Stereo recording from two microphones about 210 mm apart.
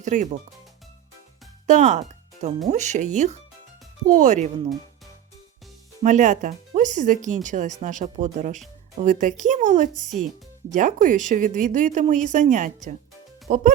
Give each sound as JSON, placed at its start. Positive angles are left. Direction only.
{"t": 0.0, "sound": "speech", "side_deg": -35}
{"t": 1.6, "sound": "speech", "side_deg": -35}
{"t": 6.0, "sound": "speech", "side_deg": -35}